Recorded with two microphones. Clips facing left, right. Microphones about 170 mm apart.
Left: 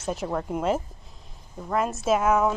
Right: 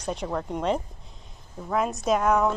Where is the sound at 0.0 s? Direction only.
5° left (ahead or behind).